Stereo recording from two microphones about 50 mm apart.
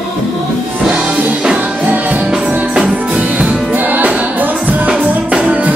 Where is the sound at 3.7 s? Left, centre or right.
Right.